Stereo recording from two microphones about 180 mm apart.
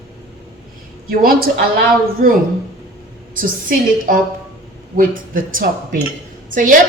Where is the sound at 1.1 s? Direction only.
55° right (ahead or behind).